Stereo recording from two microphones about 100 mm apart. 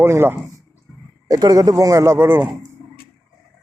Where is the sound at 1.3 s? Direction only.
40° right (ahead or behind); by 2.5 s 20° right (ahead or behind).